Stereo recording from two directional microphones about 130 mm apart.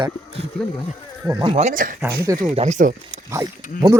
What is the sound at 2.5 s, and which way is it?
Speech, 60° right (ahead or behind).